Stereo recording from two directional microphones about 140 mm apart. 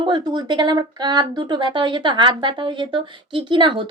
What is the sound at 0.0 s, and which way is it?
Speech, 35° right (ahead or behind).